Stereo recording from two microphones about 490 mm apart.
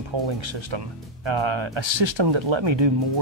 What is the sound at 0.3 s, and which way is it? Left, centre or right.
Speech, right.